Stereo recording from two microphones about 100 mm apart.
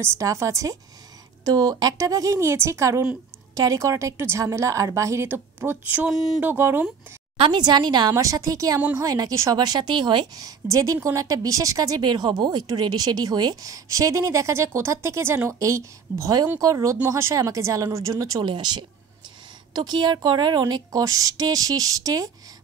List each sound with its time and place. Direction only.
0.0 s a woman's voice: 30° right (ahead or behind); by 6.1 s 15° right (ahead or behind)
6.1 s speech: centre (ahead or behind)
6.4 s speech: 20° right (ahead or behind)
7.3 s a woman's voice: 55° right (ahead or behind)
8.1 s a woman's voice: 35° right (ahead or behind)
18.4 s a woman's voice: 50° right (ahead or behind)